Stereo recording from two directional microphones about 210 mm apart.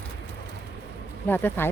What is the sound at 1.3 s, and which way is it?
Speech, 10° left (ahead or behind).